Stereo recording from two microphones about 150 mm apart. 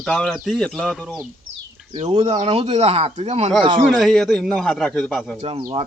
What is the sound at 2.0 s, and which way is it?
Speech, 40° right (ahead or behind).